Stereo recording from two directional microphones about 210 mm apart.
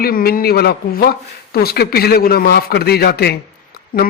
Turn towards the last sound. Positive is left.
turn(degrees=45)  # may be behind; listen again after turning